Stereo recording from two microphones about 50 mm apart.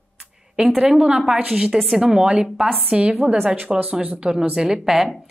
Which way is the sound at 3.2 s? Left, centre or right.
Right.